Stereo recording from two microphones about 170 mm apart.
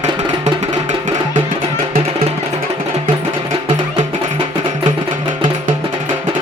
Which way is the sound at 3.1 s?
30° right (ahead or behind).